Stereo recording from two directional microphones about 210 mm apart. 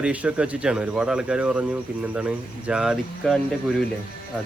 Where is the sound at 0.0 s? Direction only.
5° right (ahead or behind).